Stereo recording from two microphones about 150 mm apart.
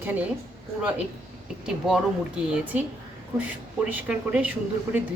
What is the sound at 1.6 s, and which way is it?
Speech, 5° right (ahead or behind).